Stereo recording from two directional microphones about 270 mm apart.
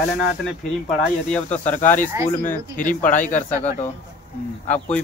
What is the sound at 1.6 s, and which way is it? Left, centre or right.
Speech, centre.